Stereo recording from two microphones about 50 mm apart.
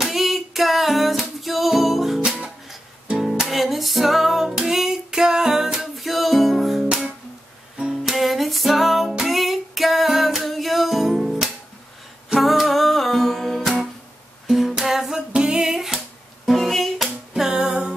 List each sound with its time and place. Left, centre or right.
0.0 s music: centre
7.7 s music: centre
8.0 s music: centre
14.8 s music: centre
16.4 s music: centre
17.4 s music: centre